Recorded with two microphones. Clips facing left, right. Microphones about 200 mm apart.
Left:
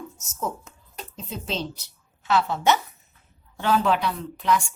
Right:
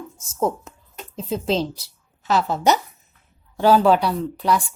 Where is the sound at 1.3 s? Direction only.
35° right (ahead or behind).